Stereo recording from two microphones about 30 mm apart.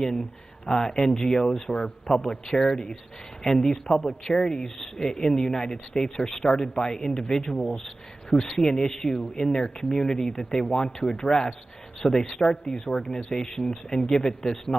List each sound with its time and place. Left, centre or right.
0.7 s speech: centre
4.6 s speech: centre
5.0 s speech: left
7.6 s speech: centre
8.3 s speech: centre